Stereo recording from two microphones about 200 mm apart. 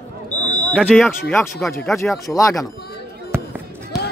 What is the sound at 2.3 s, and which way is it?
Speech, 15° left (ahead or behind).